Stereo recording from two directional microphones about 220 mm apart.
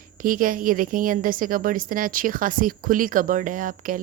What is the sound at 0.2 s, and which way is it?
A woman's voice, 40° right (ahead or behind).